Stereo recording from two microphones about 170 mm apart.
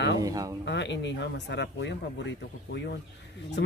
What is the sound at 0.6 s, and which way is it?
A man's voice, 90° left.